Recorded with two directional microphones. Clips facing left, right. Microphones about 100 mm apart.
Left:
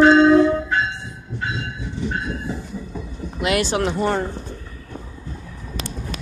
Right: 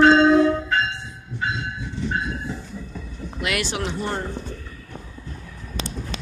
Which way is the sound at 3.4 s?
30° left (ahead or behind).